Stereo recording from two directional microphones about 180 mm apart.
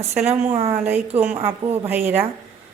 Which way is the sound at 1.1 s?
10° right (ahead or behind).